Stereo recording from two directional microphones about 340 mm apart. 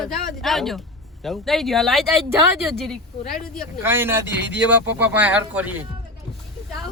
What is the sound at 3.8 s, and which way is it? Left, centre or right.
Speech, centre.